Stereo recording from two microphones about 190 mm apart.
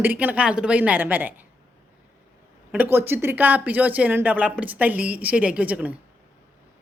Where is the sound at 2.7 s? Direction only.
10° right (ahead or behind).